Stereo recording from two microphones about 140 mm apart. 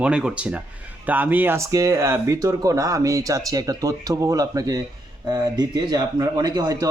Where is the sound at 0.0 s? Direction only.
5° right (ahead or behind).